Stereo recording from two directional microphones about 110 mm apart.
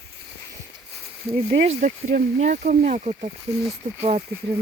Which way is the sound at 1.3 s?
70° right (ahead or behind).